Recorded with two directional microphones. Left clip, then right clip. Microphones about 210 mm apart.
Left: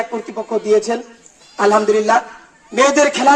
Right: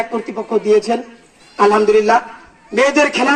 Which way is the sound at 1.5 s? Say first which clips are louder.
Right 2 dB; 50° left (ahead or behind).